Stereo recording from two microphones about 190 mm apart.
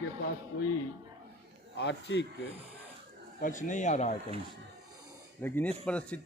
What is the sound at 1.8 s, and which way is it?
Speech, 65° left (ahead or behind).